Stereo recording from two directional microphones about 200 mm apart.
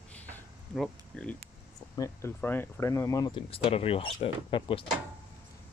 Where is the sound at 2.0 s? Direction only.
15° left (ahead or behind).